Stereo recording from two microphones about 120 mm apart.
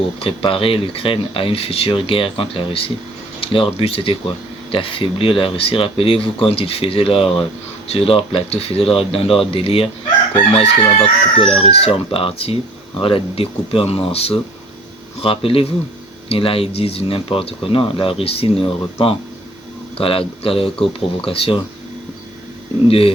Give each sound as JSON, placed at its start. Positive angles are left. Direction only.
{"t": 0.2, "sound": "speech", "side_deg": 50}
{"t": 20.7, "sound": "speech", "side_deg": 5}
{"t": 21.2, "sound": "speech", "side_deg": 50}
{"t": 22.9, "sound": "speech", "side_deg": 50}